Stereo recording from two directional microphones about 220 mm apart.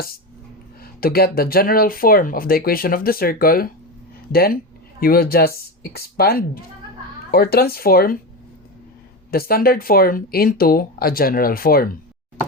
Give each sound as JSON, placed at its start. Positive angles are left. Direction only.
{"t": 0.8, "sound": "speech", "side_deg": 45}
{"t": 9.3, "sound": "speech", "side_deg": 45}